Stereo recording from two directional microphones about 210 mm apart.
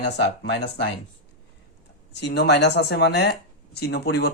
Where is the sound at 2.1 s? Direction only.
55° left (ahead or behind).